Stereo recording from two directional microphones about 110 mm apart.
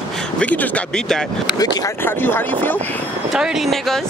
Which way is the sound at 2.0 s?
20° left (ahead or behind).